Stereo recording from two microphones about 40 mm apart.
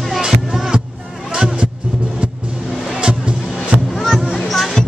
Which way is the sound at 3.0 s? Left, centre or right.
Right.